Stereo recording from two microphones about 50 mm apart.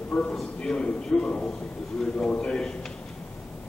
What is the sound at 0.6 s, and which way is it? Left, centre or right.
A man's voice, centre.